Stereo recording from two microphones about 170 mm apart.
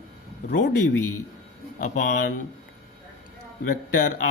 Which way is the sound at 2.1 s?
55° left (ahead or behind).